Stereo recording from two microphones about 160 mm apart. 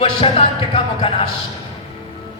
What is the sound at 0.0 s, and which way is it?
Speech, 35° left (ahead or behind).